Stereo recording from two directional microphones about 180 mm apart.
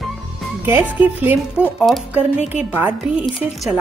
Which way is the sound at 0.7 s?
10° right (ahead or behind).